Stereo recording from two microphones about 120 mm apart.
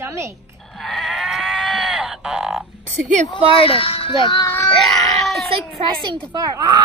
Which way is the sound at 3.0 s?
90° right.